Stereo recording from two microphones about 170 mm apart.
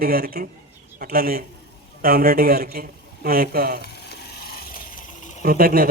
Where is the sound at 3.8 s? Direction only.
70° left (ahead or behind).